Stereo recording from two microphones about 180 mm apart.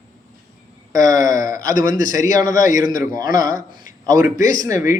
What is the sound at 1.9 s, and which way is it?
A man's voice, 45° left (ahead or behind).